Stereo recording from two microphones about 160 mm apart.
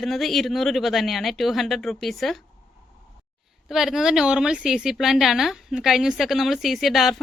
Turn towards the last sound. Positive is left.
turn(degrees=0)  # may be behind; listen again after turning